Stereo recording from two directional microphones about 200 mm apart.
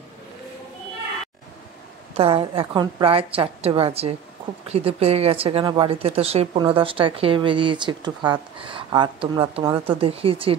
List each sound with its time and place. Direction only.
2.1 s a woman's voice: 30° right (ahead or behind)